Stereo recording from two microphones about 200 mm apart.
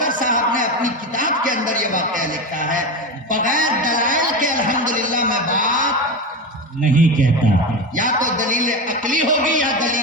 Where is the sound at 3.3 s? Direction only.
40° right (ahead or behind).